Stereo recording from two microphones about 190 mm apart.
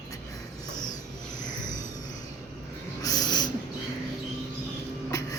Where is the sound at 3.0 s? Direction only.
20° left (ahead or behind).